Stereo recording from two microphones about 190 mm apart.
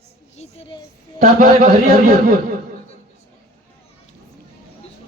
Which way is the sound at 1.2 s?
35° right (ahead or behind).